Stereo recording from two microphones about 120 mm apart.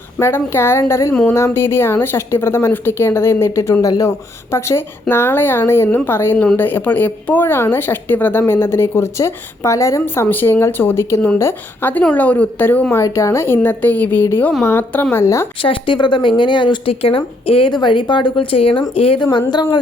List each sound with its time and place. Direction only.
0.2 s a woman's voice: 20° left (ahead or behind)
13.0 s a woman's voice: 25° left (ahead or behind)
15.6 s speech: 45° left (ahead or behind)